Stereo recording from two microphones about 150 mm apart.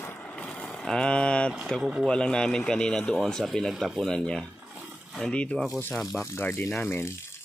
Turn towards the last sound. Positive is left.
turn(degrees=15)  # may be behind; listen again after turning